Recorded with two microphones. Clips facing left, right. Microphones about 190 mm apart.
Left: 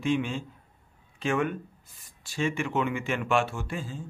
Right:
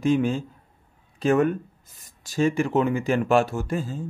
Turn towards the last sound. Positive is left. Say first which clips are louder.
# right 7 dB
turn(degrees=-40)  # may be behind; listen again after turning